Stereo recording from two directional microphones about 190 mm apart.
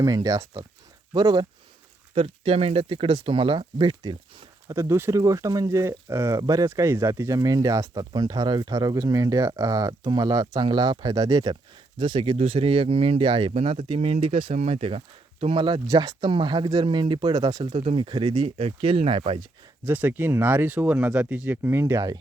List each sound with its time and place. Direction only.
0.0 s speech: 20° right (ahead or behind)
19.8 s speech: 10° right (ahead or behind)